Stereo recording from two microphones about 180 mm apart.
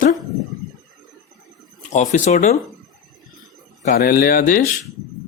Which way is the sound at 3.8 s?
55° left (ahead or behind).